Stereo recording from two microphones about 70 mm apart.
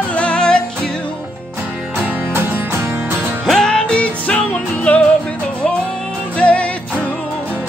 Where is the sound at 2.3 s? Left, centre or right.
Right.